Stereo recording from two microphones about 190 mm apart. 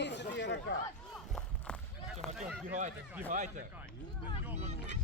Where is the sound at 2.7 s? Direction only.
40° right (ahead or behind).